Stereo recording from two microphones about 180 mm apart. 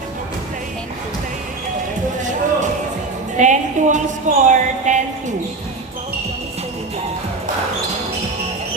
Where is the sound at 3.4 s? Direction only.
40° right (ahead or behind).